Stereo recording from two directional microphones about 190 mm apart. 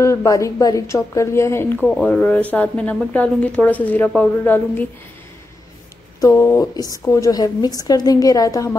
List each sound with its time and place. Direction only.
0.0 s a woman's voice: 15° left (ahead or behind)
6.2 s a woman's voice: 15° left (ahead or behind)